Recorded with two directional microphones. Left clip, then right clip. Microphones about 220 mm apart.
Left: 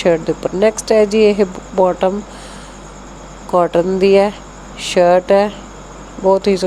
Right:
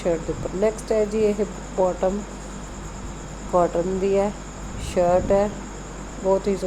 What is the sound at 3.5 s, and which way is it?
Speech, 25° left (ahead or behind).